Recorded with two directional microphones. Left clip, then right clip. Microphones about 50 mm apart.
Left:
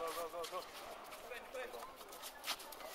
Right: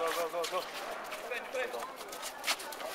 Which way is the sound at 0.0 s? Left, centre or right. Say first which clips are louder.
Right 10 dB; centre.